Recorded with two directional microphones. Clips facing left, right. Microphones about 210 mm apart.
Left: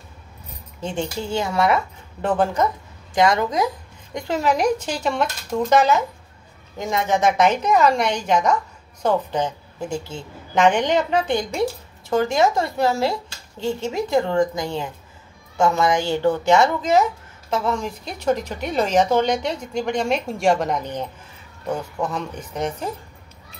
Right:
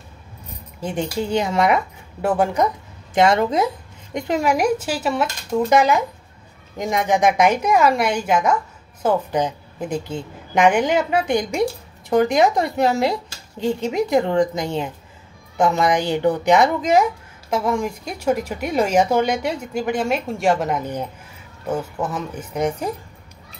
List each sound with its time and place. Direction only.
0.7 s speech: 15° right (ahead or behind)
3.2 s a woman's voice: 25° right (ahead or behind)